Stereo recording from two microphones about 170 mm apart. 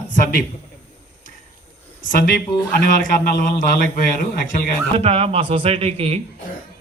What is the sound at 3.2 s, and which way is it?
Speech, 55° left (ahead or behind).